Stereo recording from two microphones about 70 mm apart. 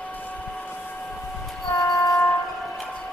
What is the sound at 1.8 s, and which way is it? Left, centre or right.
Train, left.